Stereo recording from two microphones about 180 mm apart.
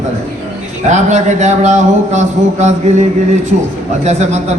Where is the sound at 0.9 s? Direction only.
40° right (ahead or behind).